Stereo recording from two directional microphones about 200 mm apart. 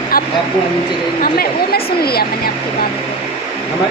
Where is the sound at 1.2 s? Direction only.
50° left (ahead or behind).